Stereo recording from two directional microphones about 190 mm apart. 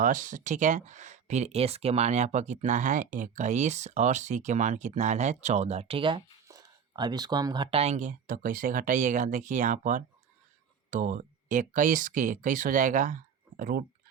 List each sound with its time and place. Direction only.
0.0 s speech: 45° right (ahead or behind)